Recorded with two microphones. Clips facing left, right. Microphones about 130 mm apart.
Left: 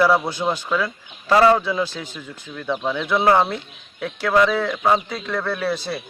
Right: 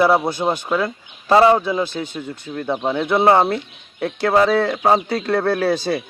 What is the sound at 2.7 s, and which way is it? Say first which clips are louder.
Speech: right 3 dB; 35° right (ahead or behind).